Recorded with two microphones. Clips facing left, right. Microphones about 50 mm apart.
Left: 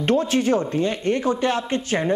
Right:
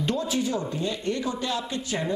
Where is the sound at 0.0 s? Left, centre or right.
Left.